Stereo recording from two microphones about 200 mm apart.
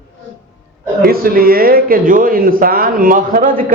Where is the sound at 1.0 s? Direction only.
45° right (ahead or behind).